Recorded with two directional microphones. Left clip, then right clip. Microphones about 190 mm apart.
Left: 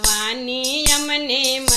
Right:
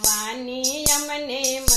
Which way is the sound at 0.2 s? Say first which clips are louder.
Left 4 dB; 30° left (ahead or behind).